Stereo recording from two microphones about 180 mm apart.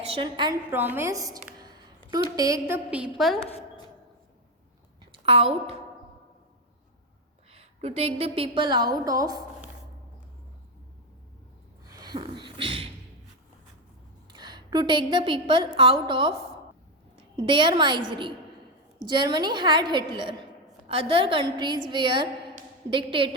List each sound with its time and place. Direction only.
0.0 s a woman's voice: 30° right (ahead or behind)
0.7 s a woman's voice: 10° right (ahead or behind)
1.6 s a sound: 20° right (ahead or behind)
2.3 s a woman's voice: 20° right (ahead or behind); by 3.4 s centre (ahead or behind)
5.1 s a woman's voice: 30° right (ahead or behind)
7.5 s a woman's voice: 35° right (ahead or behind); by 9.4 s 20° right (ahead or behind)
11.9 s a sound: 20° right (ahead or behind)
14.3 s a woman's voice: 25° right (ahead or behind)
17.3 s a woman's voice: 25° right (ahead or behind)